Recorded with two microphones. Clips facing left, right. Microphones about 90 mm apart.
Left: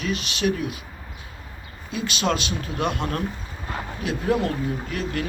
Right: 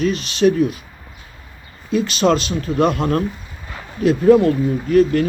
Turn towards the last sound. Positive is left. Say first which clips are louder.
# right 14 dB
turn(degrees=-40)  # may be behind; listen again after turning